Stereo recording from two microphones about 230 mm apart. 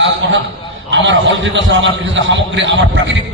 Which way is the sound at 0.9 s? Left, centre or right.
Right.